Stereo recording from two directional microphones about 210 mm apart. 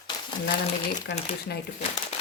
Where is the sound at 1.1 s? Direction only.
55° left (ahead or behind).